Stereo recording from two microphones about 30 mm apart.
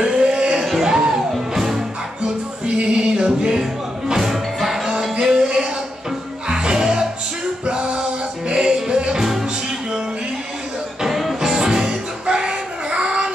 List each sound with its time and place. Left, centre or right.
0.0 s music: right
0.7 s music: centre
2.6 s music: right
4.1 s music: centre
5.4 s a sound: right
6.5 s music: right
11.1 s music: centre
11.4 s music: centre